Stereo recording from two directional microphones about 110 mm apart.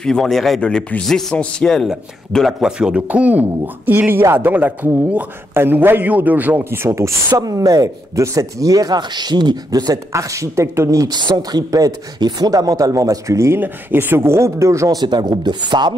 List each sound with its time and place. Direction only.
0.0 s a man's voice: 5° left (ahead or behind); by 15.9 s 40° right (ahead or behind)